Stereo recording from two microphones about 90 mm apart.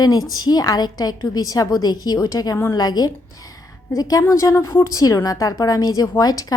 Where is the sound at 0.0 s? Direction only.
45° left (ahead or behind).